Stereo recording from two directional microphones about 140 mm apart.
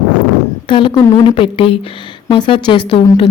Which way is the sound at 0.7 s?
35° left (ahead or behind).